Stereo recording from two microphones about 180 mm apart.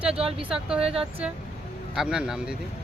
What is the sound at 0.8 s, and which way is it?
Speech, 30° right (ahead or behind).